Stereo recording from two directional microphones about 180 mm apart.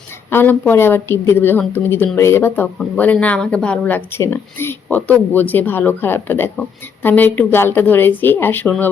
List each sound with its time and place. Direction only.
0.3 s speech: 10° left (ahead or behind)